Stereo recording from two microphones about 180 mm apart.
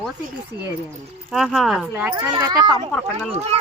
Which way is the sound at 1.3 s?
Centre (ahead or behind).